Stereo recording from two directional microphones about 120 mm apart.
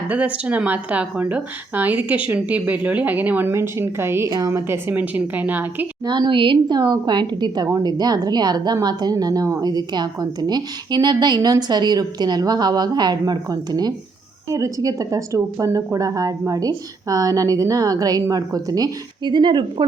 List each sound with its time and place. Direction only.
0.1 s speech: 10° right (ahead or behind)
6.1 s a woman's voice: 40° right (ahead or behind)